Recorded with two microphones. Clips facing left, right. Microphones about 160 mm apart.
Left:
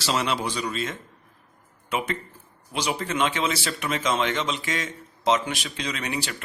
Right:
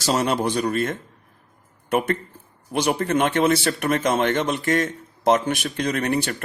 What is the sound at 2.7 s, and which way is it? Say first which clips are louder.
Speech: right 6 dB; 55° right (ahead or behind).